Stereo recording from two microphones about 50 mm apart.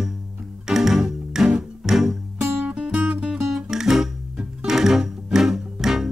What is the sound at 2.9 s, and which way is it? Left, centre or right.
Music, right.